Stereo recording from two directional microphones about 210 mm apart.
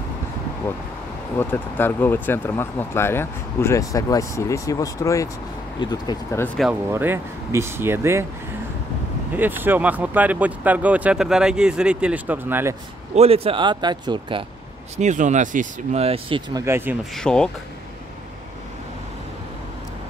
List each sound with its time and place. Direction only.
1.4 s speech: 10° left (ahead or behind)
6.4 s speech: 5° left (ahead or behind)
6.9 s speech: 10° right (ahead or behind)
9.3 s speech: 10° right (ahead or behind)
13.1 s speech: 30° right (ahead or behind)
15.0 s speech: 35° right (ahead or behind)
16.6 s speech: 10° right (ahead or behind)
17.1 s speech: 5° left (ahead or behind)